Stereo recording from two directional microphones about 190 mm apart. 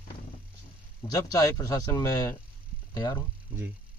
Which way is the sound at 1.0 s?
20° left (ahead or behind).